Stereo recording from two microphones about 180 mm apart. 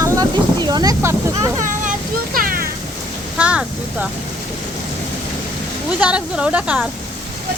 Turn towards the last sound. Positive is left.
turn(degrees=-5)  # may be behind; listen again after turning